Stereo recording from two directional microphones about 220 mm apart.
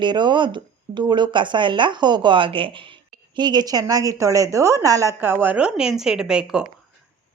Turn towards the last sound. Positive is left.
turn(degrees=-5)  # may be behind; listen again after turning